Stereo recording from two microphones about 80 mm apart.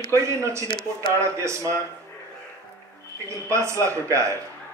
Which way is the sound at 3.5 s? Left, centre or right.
Right.